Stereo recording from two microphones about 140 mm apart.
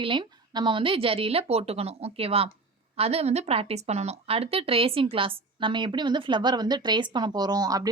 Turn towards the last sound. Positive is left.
turn(degrees=-25)  # may be behind; listen again after turning